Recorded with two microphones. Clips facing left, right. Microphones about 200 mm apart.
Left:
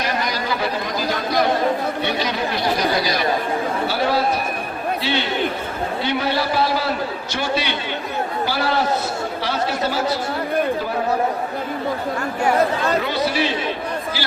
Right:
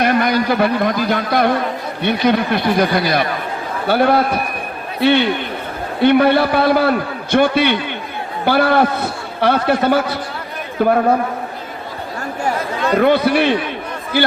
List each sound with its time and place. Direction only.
0.0 s a man's voice: 55° right (ahead or behind)
13.0 s a man's voice: 55° right (ahead or behind)